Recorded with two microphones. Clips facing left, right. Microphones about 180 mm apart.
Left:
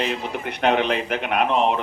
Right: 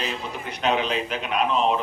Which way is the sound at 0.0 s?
60° left (ahead or behind).